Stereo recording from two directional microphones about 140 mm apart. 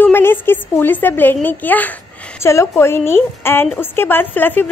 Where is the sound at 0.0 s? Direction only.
15° left (ahead or behind).